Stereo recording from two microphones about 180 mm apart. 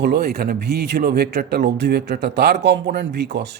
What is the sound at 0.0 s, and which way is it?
A man's voice, 65° right (ahead or behind).